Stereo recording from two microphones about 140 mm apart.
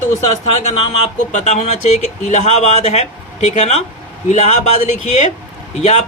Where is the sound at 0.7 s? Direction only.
45° left (ahead or behind).